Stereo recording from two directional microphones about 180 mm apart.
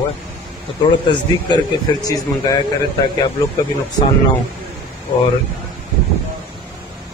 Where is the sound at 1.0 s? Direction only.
20° left (ahead or behind).